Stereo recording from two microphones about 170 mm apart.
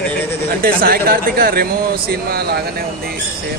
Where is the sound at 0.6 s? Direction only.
60° right (ahead or behind).